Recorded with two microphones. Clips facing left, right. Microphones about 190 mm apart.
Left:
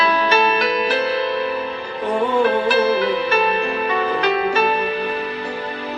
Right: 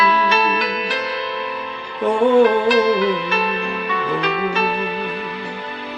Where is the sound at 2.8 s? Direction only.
35° left (ahead or behind).